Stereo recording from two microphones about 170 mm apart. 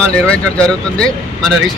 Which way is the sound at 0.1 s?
5° left (ahead or behind).